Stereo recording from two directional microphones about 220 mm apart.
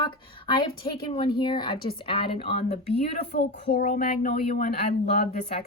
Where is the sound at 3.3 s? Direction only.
40° left (ahead or behind).